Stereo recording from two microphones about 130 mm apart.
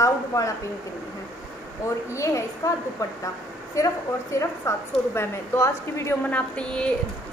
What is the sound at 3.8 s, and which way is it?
A woman's voice, 25° left (ahead or behind).